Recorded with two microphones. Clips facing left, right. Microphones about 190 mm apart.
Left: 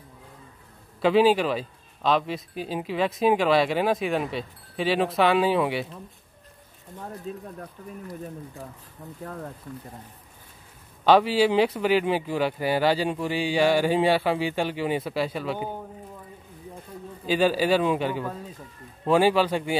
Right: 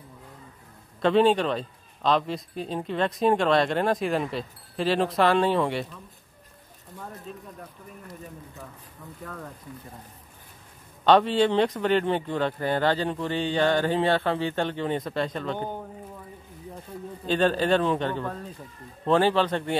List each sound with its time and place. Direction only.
1.0 s a man's voice: 5° left (ahead or behind)
9.2 s speech: 30° left (ahead or behind)
11.1 s speech: 5° left (ahead or behind)
17.3 s speech: 5° left (ahead or behind)